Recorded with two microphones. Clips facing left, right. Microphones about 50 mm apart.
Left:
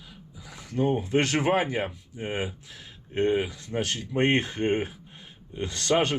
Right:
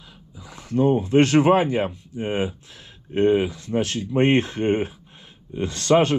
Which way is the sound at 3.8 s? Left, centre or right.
Right.